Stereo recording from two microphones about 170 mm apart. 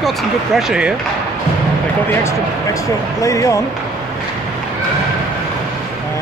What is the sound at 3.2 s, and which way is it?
Speech, 20° left (ahead or behind).